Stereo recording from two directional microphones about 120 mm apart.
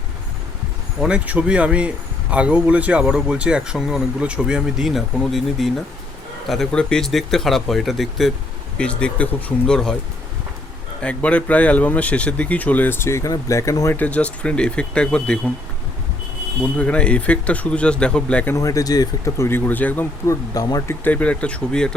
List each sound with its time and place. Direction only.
1.0 s speech: 10° right (ahead or behind)
11.0 s speech: 10° left (ahead or behind)
13.9 s speech: 10° left (ahead or behind)
16.7 s speech: 10° left (ahead or behind)
18.5 s speech: 25° left (ahead or behind)
21.0 s speech: 10° left (ahead or behind)